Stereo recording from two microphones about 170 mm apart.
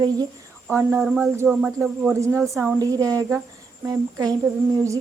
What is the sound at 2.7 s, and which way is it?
A woman's voice, 20° right (ahead or behind).